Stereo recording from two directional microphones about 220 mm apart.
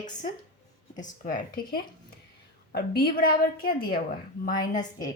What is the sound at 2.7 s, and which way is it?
A woman's voice, 45° left (ahead or behind).